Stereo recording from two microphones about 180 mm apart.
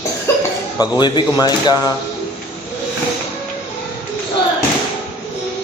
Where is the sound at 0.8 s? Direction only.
25° left (ahead or behind).